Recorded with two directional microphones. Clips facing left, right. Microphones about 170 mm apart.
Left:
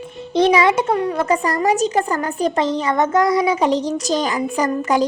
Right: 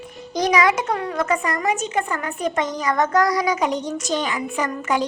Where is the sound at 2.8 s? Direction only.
20° left (ahead or behind).